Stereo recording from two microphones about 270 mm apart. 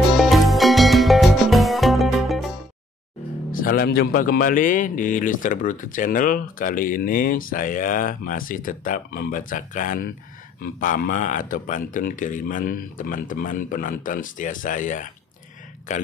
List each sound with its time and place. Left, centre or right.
0.2 s music: centre
3.5 s a man's voice: left